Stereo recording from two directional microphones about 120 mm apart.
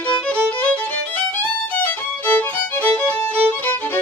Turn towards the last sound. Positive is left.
turn(degrees=15)  # may be behind; listen again after turning